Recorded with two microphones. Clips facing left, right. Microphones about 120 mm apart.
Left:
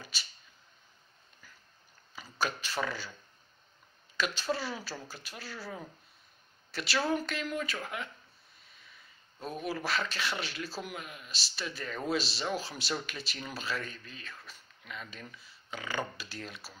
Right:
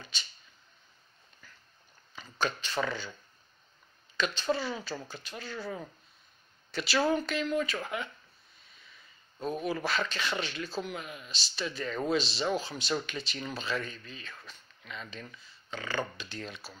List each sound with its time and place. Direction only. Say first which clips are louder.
0.0 s a sound: even; 5° left (ahead or behind)
2.1 s speech: right 1 dB; 10° left (ahead or behind)
4.2 s speech: right 2 dB; 5° left (ahead or behind)
9.4 s speech: right 4 dB; 5° left (ahead or behind)